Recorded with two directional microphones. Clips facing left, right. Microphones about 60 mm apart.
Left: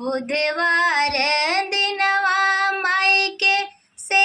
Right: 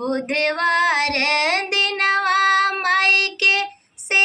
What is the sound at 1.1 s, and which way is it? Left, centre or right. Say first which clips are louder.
Child singing: right 1 dB; right.